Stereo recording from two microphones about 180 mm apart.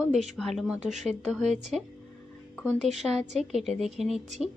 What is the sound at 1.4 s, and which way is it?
A woman's voice, centre (ahead or behind).